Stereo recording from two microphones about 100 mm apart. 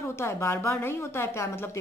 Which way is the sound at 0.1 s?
25° left (ahead or behind).